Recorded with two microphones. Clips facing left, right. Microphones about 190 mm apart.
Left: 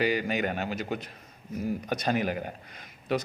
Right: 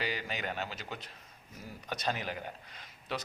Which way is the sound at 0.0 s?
50° left (ahead or behind).